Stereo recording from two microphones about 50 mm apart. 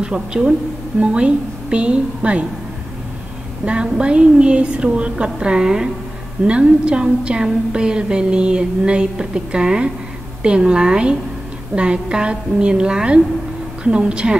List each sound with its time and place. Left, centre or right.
0.0 s a woman's voice: centre
3.6 s a woman's voice: right